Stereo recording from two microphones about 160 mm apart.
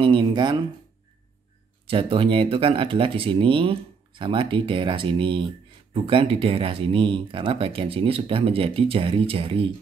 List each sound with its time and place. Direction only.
0.0 s speech: 30° right (ahead or behind)
1.9 s speech: 35° right (ahead or behind)